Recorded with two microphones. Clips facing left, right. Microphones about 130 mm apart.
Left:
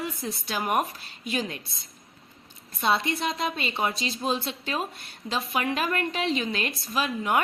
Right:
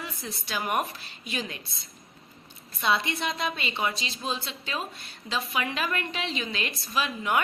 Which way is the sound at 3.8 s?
40° left (ahead or behind).